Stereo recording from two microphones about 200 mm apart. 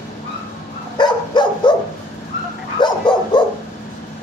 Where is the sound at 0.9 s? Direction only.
20° left (ahead or behind).